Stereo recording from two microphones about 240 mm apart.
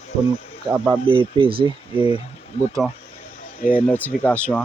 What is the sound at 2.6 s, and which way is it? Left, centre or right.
Speech, left.